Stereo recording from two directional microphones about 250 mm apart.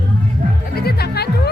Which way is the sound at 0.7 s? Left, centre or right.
Left.